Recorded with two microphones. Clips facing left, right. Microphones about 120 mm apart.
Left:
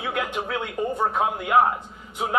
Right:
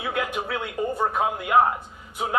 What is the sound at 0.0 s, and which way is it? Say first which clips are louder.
A man's voice: even; 5° right (ahead or behind).